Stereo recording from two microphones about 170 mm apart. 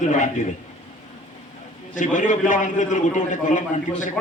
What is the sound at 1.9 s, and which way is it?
A man's voice, 50° left (ahead or behind).